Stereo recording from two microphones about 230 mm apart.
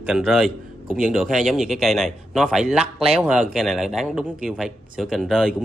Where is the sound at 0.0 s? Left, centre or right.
Centre.